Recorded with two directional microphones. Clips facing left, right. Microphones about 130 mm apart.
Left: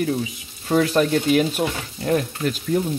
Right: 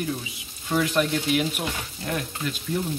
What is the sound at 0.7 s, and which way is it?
Speech, 40° left (ahead or behind).